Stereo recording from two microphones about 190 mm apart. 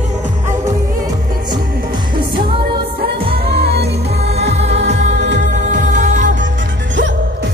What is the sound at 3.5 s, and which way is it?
Music, 60° right (ahead or behind).